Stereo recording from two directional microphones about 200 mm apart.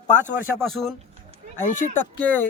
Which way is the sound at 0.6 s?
Centre (ahead or behind).